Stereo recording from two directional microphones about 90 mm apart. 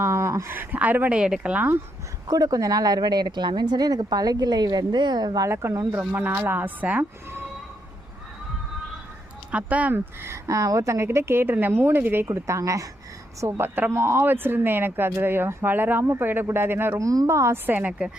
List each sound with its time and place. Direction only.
0.0 s speech: 30° right (ahead or behind); by 1.7 s 15° right (ahead or behind)
2.2 s speech: 40° right (ahead or behind)
5.5 s a woman's voice: 30° right (ahead or behind)
6.1 s speech: 20° right (ahead or behind)
9.5 s speech: 15° right (ahead or behind)
10.2 s a woman's voice: 35° right (ahead or behind)
13.4 s speech: 25° right (ahead or behind)
17.0 s a woman's voice: 40° right (ahead or behind)
17.7 s speech: 15° right (ahead or behind)